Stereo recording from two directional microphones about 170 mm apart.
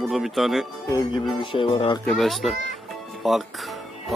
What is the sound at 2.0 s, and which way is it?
Speech, centre (ahead or behind).